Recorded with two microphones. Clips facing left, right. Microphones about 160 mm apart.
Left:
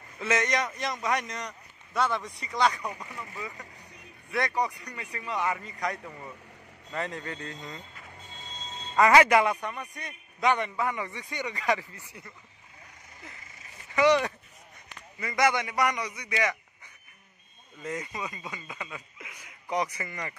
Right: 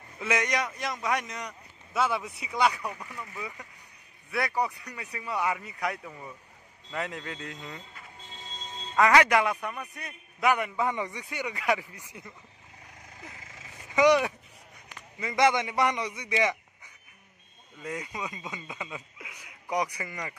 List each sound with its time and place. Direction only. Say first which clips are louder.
0.2 s a man's voice: left 1 dB; 10° right (ahead or behind)
8.9 s a man's voice: left 2 dB; 5° left (ahead or behind)
10.8 s speech: right 1 dB; 20° right (ahead or behind)
13.9 s a man's voice: right 1 dB; 10° right (ahead or behind)
17.8 s speech: left 1 dB; 10° right (ahead or behind)